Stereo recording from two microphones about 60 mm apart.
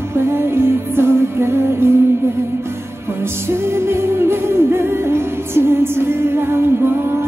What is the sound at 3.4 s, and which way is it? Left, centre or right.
Music, right.